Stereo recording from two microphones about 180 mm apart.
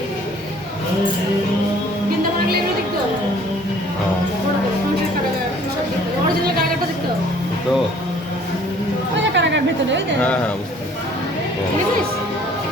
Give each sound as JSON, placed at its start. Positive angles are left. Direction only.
{"t": 9.3, "sound": "chatter", "side_deg": -80}
{"t": 10.2, "sound": "speech", "side_deg": 5}